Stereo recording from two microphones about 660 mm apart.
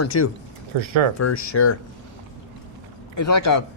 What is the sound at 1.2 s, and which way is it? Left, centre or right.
Speech, left.